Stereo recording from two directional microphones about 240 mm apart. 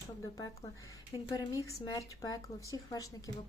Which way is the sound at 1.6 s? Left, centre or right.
Centre.